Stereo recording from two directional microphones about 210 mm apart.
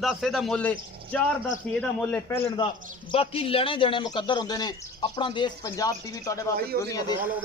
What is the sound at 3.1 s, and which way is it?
A man's voice, 25° left (ahead or behind).